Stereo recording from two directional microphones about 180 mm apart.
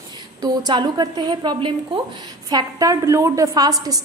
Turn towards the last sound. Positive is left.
turn(degrees=-20)  # may be behind; listen again after turning